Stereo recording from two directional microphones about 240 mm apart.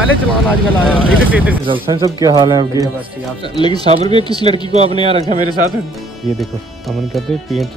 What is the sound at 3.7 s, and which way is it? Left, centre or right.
Speech, right.